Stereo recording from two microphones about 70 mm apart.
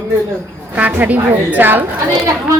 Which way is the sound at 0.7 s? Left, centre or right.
Right.